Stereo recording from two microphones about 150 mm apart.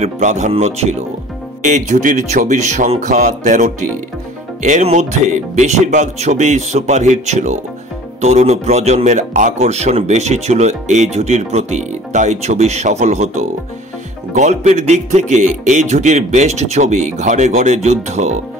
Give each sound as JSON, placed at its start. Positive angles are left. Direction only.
{"t": 0.0, "sound": "a man's voice", "side_deg": -50}